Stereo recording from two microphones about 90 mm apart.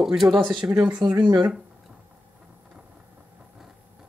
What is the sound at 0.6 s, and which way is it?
Speech, 25° right (ahead or behind).